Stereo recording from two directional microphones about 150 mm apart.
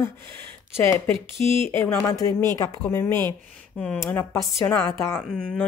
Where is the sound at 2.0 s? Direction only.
25° left (ahead or behind).